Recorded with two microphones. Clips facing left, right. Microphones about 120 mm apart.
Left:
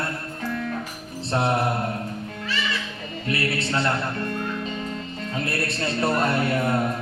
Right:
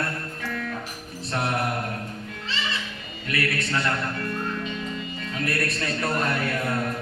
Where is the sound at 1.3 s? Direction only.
25° left (ahead or behind).